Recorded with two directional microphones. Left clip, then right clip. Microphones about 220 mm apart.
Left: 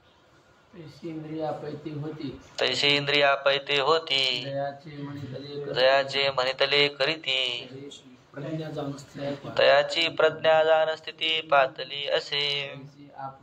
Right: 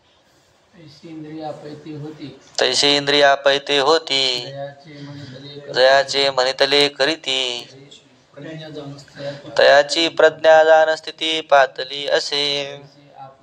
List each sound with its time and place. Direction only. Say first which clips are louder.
2.5 s mantra: right 8 dB; 50° right (ahead or behind)
5.7 s mantra: right 8 dB; 55° right (ahead or behind)
9.5 s mantra: right 8 dB; 50° right (ahead or behind)